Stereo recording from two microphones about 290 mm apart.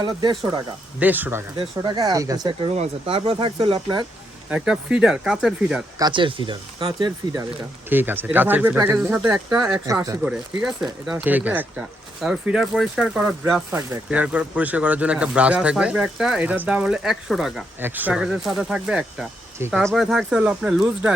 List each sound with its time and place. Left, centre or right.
0.0 s speech: centre
4.4 s speech: centre
6.0 s speech: centre